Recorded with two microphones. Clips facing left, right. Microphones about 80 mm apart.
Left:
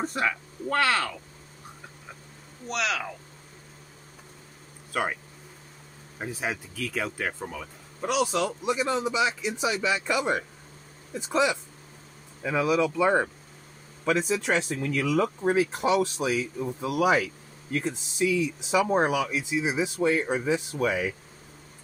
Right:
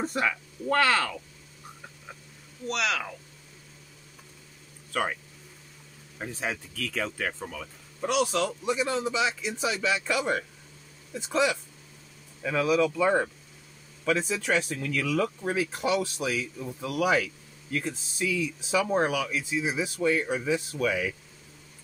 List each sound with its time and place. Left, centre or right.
0.0 s speech: centre
2.7 s speech: centre
4.9 s speech: centre
14.0 s speech: centre